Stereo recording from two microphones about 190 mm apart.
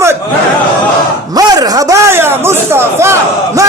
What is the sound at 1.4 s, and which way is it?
Speech, 20° right (ahead or behind).